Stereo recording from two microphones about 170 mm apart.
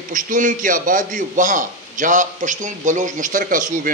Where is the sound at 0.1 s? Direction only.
50° right (ahead or behind).